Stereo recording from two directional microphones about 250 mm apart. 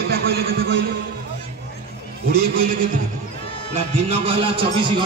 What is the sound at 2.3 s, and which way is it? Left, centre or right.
Speech, right.